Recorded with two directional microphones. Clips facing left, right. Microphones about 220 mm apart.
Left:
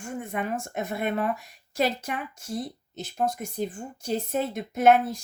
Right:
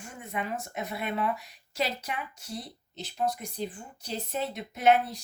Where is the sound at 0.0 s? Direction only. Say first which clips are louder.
Left 5 dB; 50° left (ahead or behind).